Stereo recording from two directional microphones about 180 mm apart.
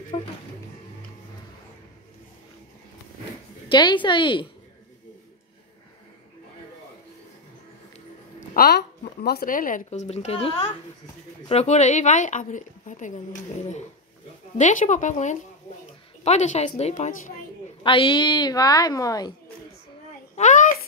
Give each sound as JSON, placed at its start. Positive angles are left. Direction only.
{"t": 0.1, "sound": "a woman's voice", "side_deg": 35}
{"t": 3.6, "sound": "a woman's voice", "side_deg": 25}
{"t": 8.4, "sound": "a woman's voice", "side_deg": 60}
{"t": 20.3, "sound": "a sound", "side_deg": 45}